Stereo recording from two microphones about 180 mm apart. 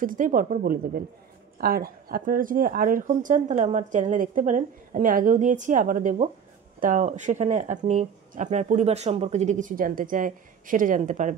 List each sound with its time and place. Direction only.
0.0 s speech: 50° right (ahead or behind)